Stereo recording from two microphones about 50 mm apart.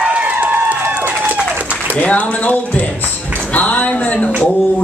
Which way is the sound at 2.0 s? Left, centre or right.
Left.